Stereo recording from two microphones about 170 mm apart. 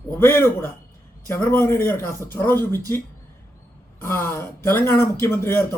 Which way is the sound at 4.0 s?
15° left (ahead or behind).